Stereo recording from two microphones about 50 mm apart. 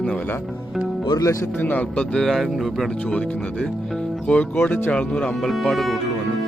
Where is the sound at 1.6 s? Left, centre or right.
Left.